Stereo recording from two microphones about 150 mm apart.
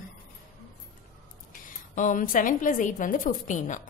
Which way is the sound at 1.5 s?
60° left (ahead or behind).